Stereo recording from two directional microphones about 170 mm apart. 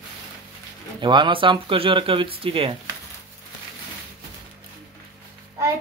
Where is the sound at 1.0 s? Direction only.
30° right (ahead or behind).